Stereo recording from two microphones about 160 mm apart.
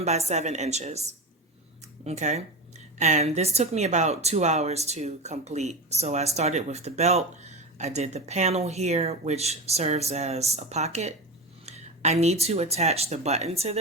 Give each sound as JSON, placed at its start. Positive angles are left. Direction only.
{"t": 0.0, "sound": "a woman's voice", "side_deg": -45}
{"t": 2.0, "sound": "a woman's voice", "side_deg": -45}